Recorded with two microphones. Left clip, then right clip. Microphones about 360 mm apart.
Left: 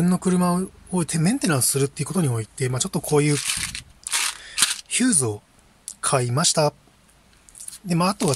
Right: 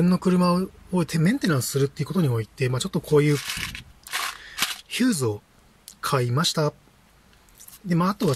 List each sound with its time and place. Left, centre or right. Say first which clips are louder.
0.0 s speech: even; centre
7.8 s speech: left 2 dB; centre